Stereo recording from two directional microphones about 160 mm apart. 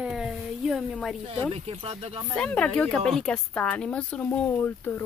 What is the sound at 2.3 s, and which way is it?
A woman's voice, 5° left (ahead or behind).